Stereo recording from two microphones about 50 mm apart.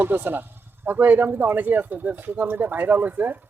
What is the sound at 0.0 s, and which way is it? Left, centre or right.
Speech, right.